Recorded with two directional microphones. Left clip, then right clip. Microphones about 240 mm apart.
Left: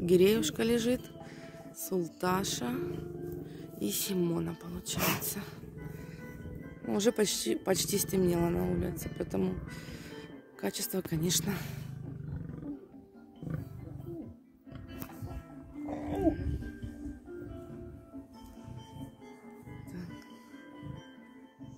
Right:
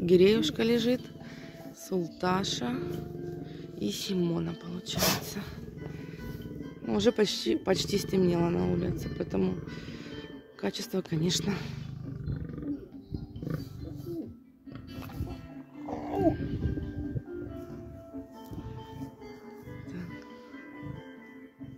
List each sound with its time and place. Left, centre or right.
0.0 s speech: centre
6.9 s speech: centre
15.8 s music: left